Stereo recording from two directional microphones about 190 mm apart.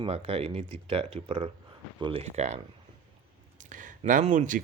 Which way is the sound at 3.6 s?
40° right (ahead or behind).